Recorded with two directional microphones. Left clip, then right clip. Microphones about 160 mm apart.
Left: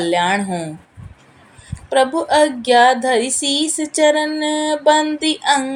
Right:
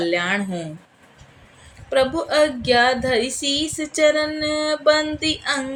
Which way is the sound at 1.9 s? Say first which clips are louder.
Left 4 dB; 15° left (ahead or behind).